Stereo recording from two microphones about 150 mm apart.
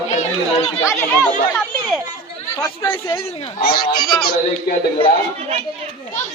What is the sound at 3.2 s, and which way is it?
Speech, 40° left (ahead or behind).